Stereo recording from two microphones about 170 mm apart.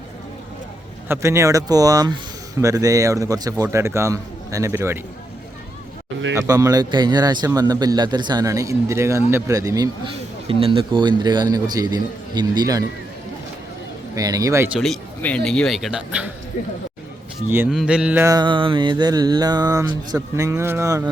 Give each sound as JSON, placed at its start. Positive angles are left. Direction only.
{"t": 1.0, "sound": "a man's voice", "side_deg": -15}
{"t": 6.5, "sound": "a man's voice", "side_deg": -20}
{"t": 14.2, "sound": "a man's voice", "side_deg": -20}
{"t": 14.8, "sound": "speech", "side_deg": 5}
{"t": 17.7, "sound": "a man's voice", "side_deg": -5}
{"t": 18.3, "sound": "a man's voice", "side_deg": -25}